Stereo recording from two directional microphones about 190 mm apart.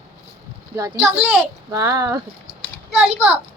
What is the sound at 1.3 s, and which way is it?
Speech, 15° right (ahead or behind).